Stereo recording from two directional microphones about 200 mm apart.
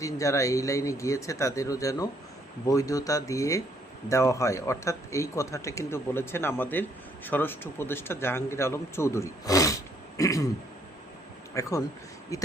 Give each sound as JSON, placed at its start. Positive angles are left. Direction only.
{"t": 0.0, "sound": "speech", "side_deg": 15}
{"t": 10.2, "sound": "throat clearing", "side_deg": 15}
{"t": 11.6, "sound": "speech", "side_deg": 15}